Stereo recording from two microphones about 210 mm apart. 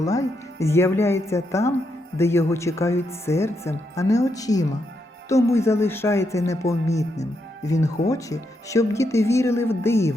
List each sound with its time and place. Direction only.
0.0 s speech: 15° left (ahead or behind)